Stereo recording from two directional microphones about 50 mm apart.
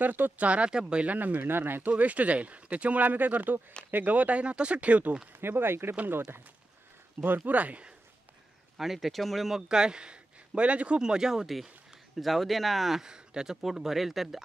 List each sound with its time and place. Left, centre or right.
0.0 s speech: right
0.5 s speech: right
1.0 s speech: right
1.9 s speech: right
5.4 s speech: right
7.2 s speech: right
8.7 s speech: centre
9.6 s a man's voice: centre
11.0 s speech: centre
12.2 s speech: centre